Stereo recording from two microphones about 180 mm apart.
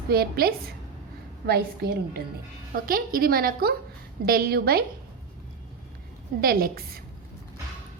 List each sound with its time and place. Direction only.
0.1 s a woman's voice: 60° right (ahead or behind)
6.4 s a woman's voice: 55° right (ahead or behind)